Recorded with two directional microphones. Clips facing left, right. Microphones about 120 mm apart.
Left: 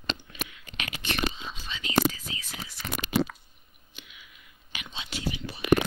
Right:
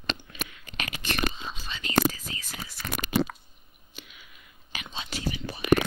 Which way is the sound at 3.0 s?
50° right (ahead or behind).